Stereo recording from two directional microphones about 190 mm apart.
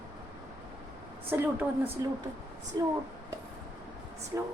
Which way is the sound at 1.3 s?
10° right (ahead or behind).